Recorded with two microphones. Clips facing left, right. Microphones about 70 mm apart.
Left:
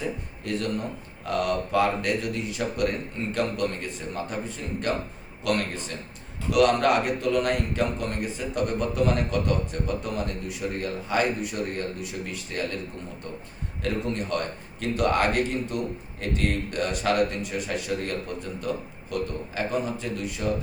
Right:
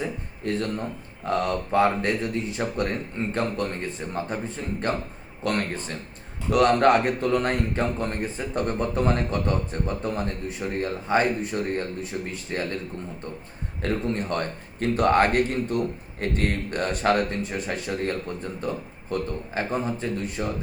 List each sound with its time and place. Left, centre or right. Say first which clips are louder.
0.4 s speech: right 1 dB; right
13.8 s speech: right 2 dB; right